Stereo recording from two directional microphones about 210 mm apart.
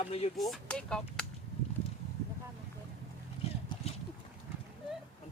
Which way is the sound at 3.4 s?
30° left (ahead or behind).